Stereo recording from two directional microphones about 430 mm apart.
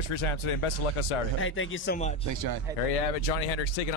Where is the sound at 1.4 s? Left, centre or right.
Left.